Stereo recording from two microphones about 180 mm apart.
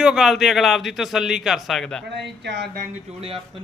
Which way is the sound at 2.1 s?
75° right (ahead or behind).